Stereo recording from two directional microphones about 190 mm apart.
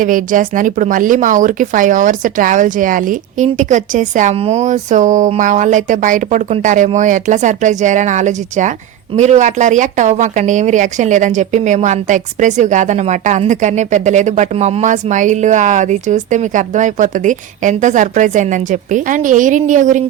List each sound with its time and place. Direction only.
0.0 s speech: 45° right (ahead or behind)